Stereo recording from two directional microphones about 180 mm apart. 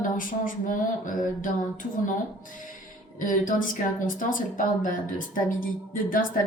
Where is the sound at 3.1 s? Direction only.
50° left (ahead or behind).